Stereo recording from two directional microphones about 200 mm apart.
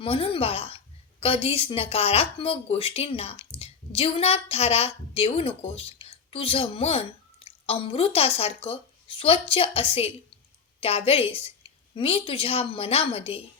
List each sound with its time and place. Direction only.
0.0 s a woman's voice: 30° left (ahead or behind)